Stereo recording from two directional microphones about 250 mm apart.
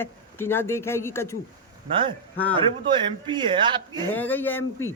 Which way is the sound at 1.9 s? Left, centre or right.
Centre.